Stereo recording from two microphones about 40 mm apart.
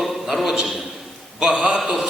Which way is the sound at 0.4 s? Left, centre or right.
Centre.